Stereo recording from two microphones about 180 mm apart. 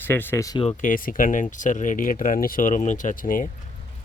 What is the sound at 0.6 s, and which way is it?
Speech, 45° left (ahead or behind).